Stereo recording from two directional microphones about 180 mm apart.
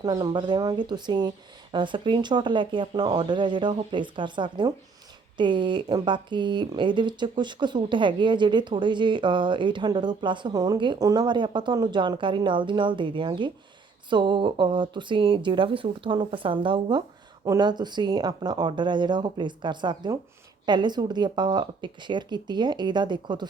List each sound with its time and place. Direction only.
0.0 s speech: 25° right (ahead or behind)